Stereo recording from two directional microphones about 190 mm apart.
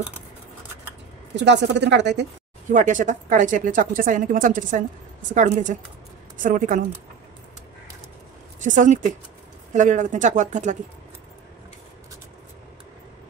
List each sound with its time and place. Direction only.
1.3 s a woman's voice: 65° right (ahead or behind)
2.7 s a woman's voice: 40° right (ahead or behind)
8.5 s a woman's voice: 40° right (ahead or behind)